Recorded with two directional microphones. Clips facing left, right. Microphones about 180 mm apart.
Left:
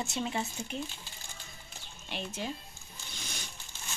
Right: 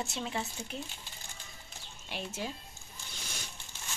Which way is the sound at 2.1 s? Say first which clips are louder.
Left 1 dB; 5° right (ahead or behind).